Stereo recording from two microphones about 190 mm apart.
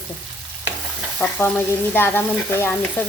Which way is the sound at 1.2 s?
5° left (ahead or behind).